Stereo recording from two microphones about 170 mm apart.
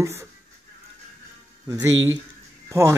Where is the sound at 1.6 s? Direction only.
20° right (ahead or behind).